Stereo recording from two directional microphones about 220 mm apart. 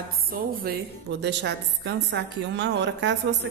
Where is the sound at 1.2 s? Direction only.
50° right (ahead or behind).